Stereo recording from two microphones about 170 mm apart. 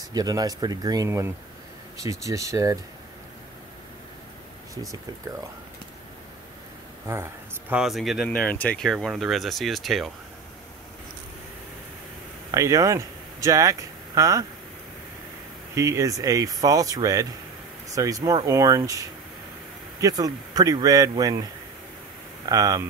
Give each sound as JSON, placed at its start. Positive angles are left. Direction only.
{"t": 0.1, "sound": "speech", "side_deg": -20}
{"t": 7.1, "sound": "speech", "side_deg": -15}
{"t": 7.8, "sound": "speech", "side_deg": 0}
{"t": 12.4, "sound": "speech", "side_deg": -20}
{"t": 15.7, "sound": "speech", "side_deg": -20}
{"t": 22.5, "sound": "speech", "side_deg": -20}